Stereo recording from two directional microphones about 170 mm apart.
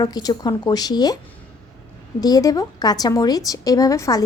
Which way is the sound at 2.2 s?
20° left (ahead or behind).